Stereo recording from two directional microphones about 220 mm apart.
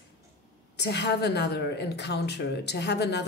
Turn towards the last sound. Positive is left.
turn(degrees=50)  # may be behind; listen again after turning